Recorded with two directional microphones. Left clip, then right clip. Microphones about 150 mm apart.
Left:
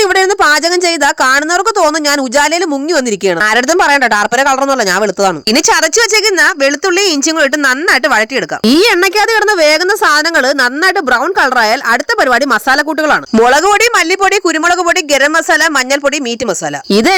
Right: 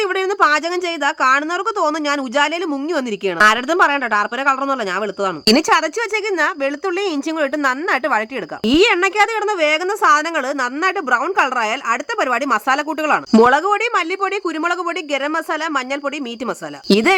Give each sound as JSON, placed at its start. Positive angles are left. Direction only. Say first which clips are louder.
{"t": 0.0, "sound": "a woman's voice", "louder": "left 7 dB", "side_deg": 40}
{"t": 8.6, "sound": "a woman's voice", "louder": "left 5 dB", "side_deg": 50}